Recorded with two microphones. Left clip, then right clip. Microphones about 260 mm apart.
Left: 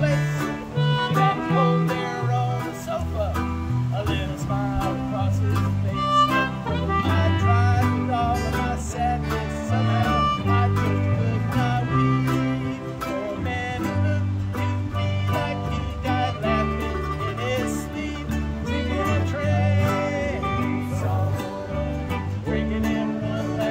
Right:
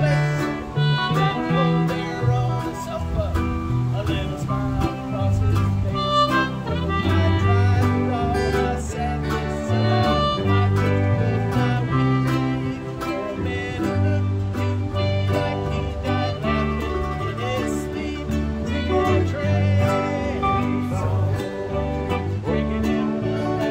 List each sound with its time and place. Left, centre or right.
0.8 s music: centre
6.0 s music: centre
9.7 s music: centre
16.1 s music: centre
18.9 s music: centre
22.5 s music: centre